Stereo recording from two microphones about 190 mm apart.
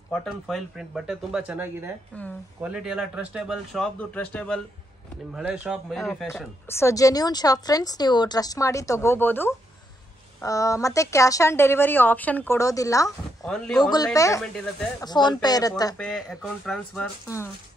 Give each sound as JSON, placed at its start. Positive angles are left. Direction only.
{"t": 0.1, "sound": "speech", "side_deg": 0}
{"t": 2.1, "sound": "a woman's voice", "side_deg": 5}
{"t": 2.6, "sound": "speech", "side_deg": -5}
{"t": 5.3, "sound": "speech", "side_deg": -5}
{"t": 6.7, "sound": "a woman's voice", "side_deg": 15}
{"t": 13.4, "sound": "speech", "side_deg": 0}
{"t": 13.8, "sound": "a woman's voice", "side_deg": 20}
{"t": 16.0, "sound": "speech", "side_deg": 0}